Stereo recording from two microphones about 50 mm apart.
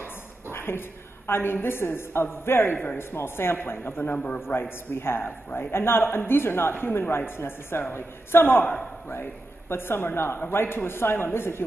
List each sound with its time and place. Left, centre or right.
0.0 s a woman's voice: left
4.5 s speech: left